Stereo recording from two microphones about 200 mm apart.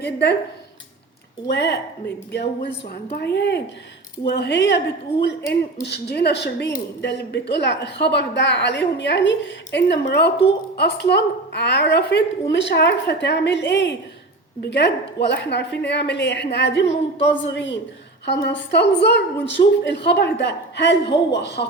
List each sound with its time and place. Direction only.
0.0 s speech: 55° left (ahead or behind)
1.5 s speech: 60° left (ahead or behind)